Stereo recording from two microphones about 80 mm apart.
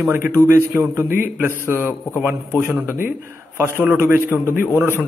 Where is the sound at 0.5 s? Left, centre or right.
Right.